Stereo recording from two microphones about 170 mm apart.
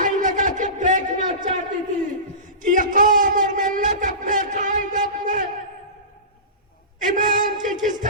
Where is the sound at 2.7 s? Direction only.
50° right (ahead or behind).